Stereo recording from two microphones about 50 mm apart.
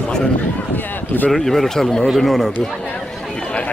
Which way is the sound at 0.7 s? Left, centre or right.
Left.